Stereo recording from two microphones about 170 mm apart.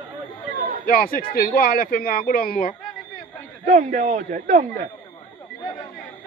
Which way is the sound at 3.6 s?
45° right (ahead or behind).